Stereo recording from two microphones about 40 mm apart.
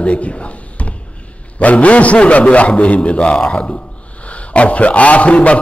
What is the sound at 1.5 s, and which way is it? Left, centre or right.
A man's voice, left.